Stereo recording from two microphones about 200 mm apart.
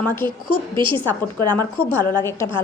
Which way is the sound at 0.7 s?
25° right (ahead or behind).